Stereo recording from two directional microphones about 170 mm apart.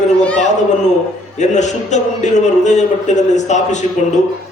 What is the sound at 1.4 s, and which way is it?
A man's voice, 45° left (ahead or behind).